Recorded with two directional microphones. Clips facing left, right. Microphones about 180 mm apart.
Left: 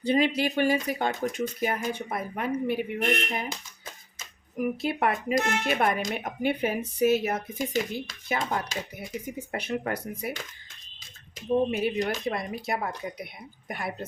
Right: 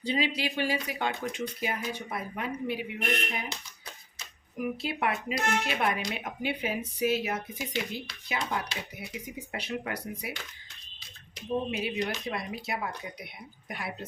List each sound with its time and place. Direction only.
0.0 s speech: 50° left (ahead or behind)
4.2 s speech: 45° left (ahead or behind)